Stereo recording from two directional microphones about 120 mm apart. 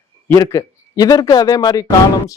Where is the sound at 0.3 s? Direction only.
30° left (ahead or behind).